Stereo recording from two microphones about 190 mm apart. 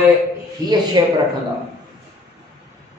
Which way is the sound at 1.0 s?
20° right (ahead or behind).